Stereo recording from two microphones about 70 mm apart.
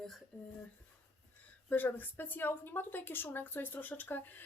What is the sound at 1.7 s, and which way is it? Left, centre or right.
Speech, left.